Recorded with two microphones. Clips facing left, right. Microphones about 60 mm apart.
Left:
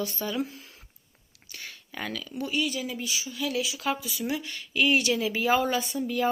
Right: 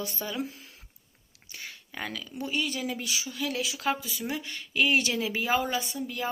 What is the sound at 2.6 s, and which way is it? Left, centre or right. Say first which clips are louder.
Speech: left 1 dB; right.